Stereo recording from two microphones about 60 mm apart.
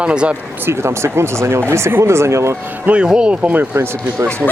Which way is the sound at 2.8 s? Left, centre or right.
Centre.